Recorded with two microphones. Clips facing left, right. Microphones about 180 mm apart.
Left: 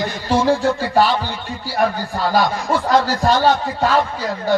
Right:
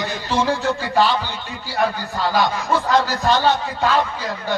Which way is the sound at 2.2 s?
40° left (ahead or behind).